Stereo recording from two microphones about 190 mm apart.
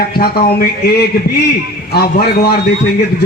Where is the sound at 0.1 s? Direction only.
50° left (ahead or behind).